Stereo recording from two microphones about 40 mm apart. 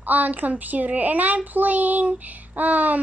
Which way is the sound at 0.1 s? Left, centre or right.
Right.